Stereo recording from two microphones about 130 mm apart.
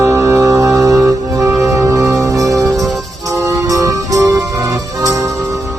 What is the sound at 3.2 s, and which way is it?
Music, 20° right (ahead or behind).